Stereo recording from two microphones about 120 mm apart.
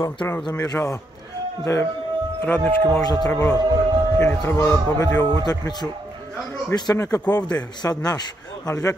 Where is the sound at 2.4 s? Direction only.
15° left (ahead or behind).